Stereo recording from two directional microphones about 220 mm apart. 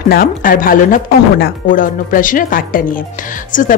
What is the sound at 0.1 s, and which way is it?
Speech, 40° left (ahead or behind).